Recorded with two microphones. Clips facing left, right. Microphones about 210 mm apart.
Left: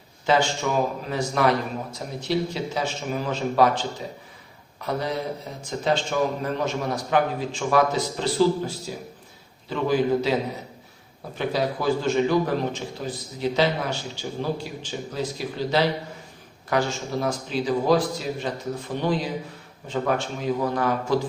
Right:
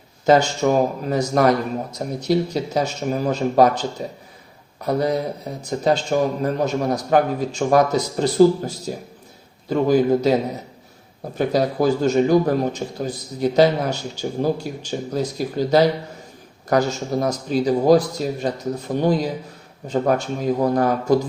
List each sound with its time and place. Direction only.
0.3 s a man's voice: 45° right (ahead or behind)
11.3 s a man's voice: 45° right (ahead or behind)